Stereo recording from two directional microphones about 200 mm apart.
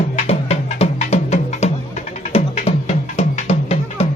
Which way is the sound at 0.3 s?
30° left (ahead or behind).